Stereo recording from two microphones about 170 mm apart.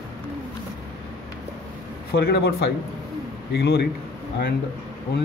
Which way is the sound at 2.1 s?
70° left (ahead or behind).